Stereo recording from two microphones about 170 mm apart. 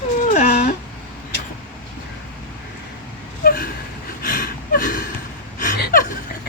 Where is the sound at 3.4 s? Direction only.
60° left (ahead or behind).